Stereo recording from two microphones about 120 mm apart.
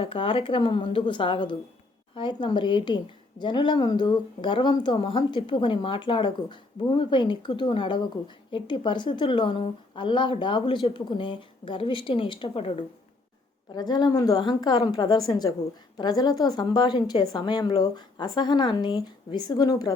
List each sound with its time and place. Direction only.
0.0 s a woman's voice: 50° left (ahead or behind)
13.7 s speech: 35° left (ahead or behind)